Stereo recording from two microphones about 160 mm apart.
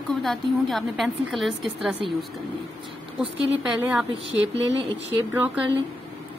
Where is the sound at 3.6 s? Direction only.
10° right (ahead or behind).